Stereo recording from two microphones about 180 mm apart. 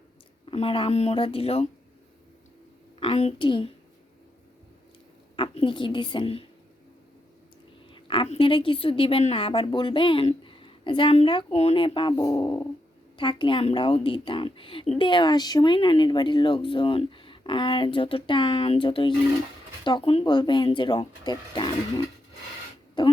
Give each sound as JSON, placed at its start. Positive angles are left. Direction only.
{"t": 0.5, "sound": "speech", "side_deg": 30}
{"t": 3.0, "sound": "a child's voice", "side_deg": 35}
{"t": 5.4, "sound": "speech", "side_deg": 30}
{"t": 7.9, "sound": "speech", "side_deg": 30}